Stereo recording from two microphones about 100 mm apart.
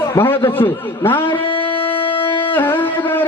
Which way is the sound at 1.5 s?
60° left (ahead or behind).